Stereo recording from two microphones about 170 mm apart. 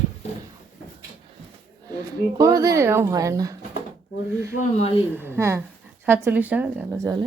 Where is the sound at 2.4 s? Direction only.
20° right (ahead or behind).